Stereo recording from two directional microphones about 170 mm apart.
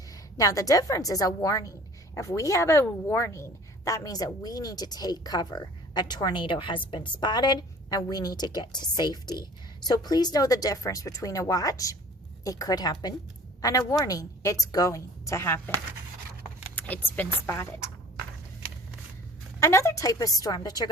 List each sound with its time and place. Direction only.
0.1 s a woman's voice: 20° left (ahead or behind)
16.7 s speech: 10° left (ahead or behind)
19.5 s a woman's voice: 15° left (ahead or behind)